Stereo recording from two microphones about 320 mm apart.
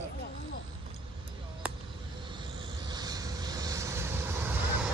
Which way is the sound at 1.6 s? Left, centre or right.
Centre.